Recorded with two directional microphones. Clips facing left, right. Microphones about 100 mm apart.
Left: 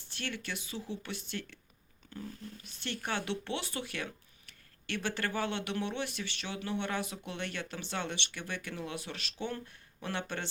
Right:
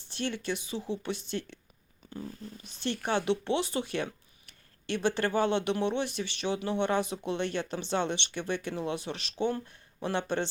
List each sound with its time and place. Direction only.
0.1 s speech: 20° right (ahead or behind)
2.6 s speech: 20° right (ahead or behind)